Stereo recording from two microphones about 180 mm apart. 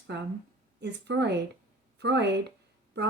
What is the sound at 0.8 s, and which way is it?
Speech, 70° right (ahead or behind).